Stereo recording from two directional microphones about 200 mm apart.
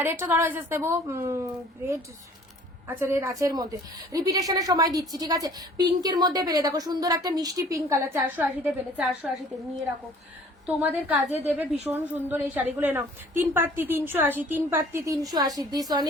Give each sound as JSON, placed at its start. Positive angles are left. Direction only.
{"t": 0.0, "sound": "a woman's voice", "side_deg": -10}
{"t": 2.8, "sound": "a woman's voice", "side_deg": -10}
{"t": 10.8, "sound": "a woman's voice", "side_deg": -10}